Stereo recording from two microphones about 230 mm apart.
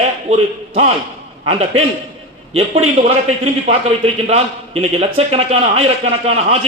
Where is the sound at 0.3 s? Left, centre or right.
Right.